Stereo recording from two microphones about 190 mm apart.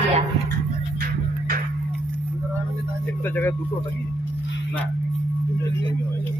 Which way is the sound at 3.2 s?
10° left (ahead or behind).